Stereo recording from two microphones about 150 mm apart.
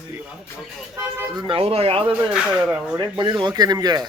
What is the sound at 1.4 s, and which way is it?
Speech, 35° right (ahead or behind).